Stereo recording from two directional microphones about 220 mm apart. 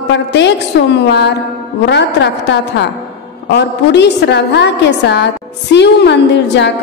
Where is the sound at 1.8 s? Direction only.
50° left (ahead or behind).